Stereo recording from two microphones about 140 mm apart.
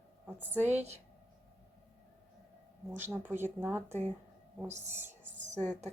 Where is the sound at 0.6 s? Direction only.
55° right (ahead or behind).